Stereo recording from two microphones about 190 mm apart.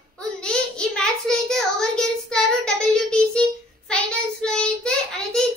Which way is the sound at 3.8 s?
5° left (ahead or behind).